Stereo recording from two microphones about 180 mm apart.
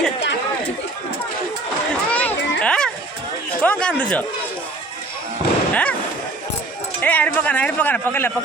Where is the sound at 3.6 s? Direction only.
5° left (ahead or behind).